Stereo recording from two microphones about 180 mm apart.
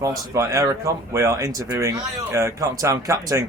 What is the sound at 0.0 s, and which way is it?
A man's voice, 15° right (ahead or behind).